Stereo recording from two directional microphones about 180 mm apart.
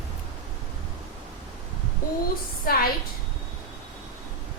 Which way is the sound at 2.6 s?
55° left (ahead or behind).